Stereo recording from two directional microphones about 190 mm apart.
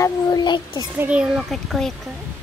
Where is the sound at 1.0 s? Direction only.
5° right (ahead or behind).